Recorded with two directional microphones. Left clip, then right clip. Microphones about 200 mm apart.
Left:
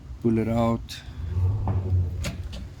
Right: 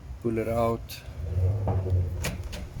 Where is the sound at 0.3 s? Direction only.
30° left (ahead or behind).